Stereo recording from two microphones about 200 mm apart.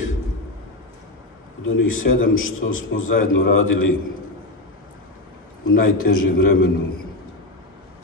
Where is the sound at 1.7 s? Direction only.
85° left.